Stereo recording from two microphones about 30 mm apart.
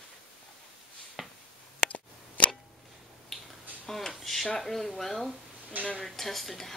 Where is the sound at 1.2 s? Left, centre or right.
Centre.